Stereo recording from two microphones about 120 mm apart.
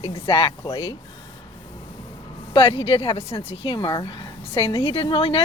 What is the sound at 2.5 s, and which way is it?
Speech, 50° left (ahead or behind).